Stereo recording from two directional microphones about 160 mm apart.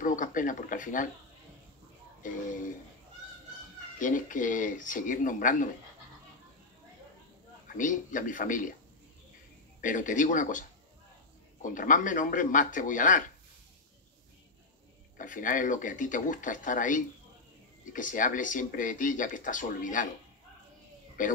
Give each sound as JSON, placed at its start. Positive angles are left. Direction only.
{"t": 0.0, "sound": "speech", "side_deg": 55}
{"t": 2.2, "sound": "speech", "side_deg": 55}
{"t": 4.0, "sound": "speech", "side_deg": 55}
{"t": 7.6, "sound": "speech", "side_deg": 55}
{"t": 9.8, "sound": "speech", "side_deg": 55}
{"t": 11.6, "sound": "speech", "side_deg": 55}
{"t": 15.1, "sound": "speech", "side_deg": 55}
{"t": 21.2, "sound": "speech", "side_deg": 55}